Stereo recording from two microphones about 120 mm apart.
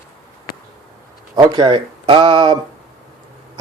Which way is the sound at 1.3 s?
35° right (ahead or behind).